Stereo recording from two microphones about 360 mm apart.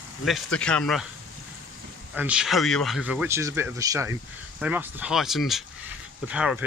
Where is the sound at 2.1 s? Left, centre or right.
Centre.